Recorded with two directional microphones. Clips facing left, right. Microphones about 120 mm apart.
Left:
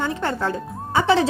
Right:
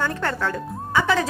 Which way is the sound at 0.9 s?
30° left (ahead or behind).